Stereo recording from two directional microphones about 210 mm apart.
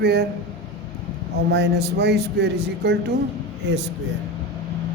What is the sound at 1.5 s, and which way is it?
Speech, 50° right (ahead or behind).